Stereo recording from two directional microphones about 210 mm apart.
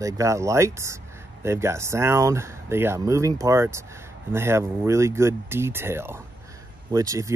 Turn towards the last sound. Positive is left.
turn(degrees=-15)  # may be behind; listen again after turning